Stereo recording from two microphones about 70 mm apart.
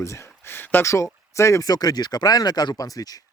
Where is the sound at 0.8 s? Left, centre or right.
Left.